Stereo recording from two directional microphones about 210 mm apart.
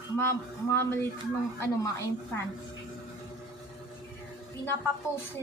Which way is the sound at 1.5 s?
15° left (ahead or behind).